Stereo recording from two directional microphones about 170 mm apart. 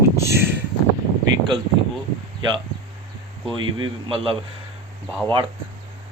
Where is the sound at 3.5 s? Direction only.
30° right (ahead or behind).